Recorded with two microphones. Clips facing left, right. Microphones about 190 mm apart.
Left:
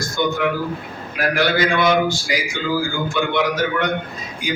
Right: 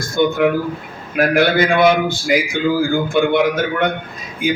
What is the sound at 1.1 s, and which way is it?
A man's voice, 55° right (ahead or behind).